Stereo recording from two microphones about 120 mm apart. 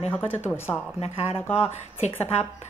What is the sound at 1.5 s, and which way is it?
Speech, 65° left (ahead or behind).